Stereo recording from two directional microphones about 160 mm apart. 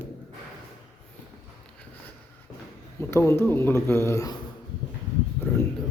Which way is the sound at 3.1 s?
15° left (ahead or behind).